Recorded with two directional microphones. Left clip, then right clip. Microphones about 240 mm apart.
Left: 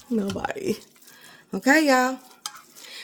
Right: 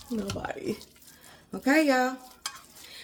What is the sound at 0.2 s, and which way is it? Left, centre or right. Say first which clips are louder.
Speech: left 6 dB; left.